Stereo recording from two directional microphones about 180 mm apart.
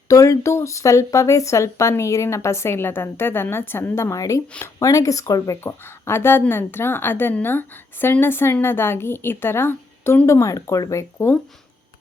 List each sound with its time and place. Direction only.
0.1 s speech: 15° left (ahead or behind)